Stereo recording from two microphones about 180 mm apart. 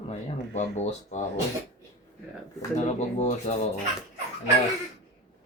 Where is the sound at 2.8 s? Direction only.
40° left (ahead or behind).